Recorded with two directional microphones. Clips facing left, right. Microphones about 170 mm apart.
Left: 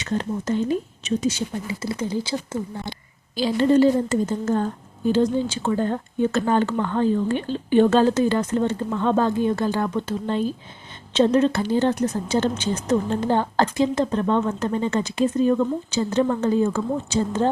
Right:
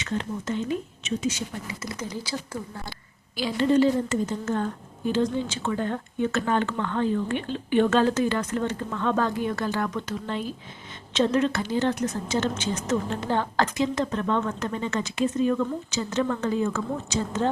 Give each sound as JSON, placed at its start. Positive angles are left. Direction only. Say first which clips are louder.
{"t": 0.0, "sound": "speech", "louder": "left 4 dB", "side_deg": 40}